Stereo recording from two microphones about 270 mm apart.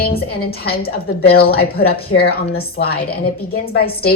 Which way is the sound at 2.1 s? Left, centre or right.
Left.